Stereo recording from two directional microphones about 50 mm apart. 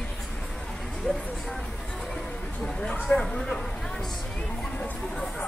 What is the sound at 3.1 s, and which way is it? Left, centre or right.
Speech, centre.